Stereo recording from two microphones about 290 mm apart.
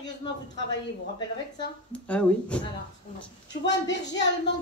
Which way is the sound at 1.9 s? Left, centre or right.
Centre.